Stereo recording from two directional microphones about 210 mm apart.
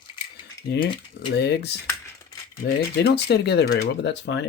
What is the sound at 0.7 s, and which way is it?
Speech, 55° left (ahead or behind).